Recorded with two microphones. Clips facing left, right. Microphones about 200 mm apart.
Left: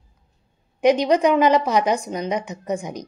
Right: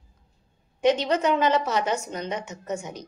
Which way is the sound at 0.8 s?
15° left (ahead or behind).